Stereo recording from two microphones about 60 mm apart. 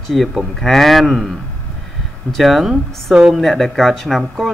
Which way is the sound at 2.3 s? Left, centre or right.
Centre.